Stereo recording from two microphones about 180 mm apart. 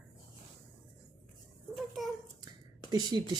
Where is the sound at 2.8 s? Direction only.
20° right (ahead or behind).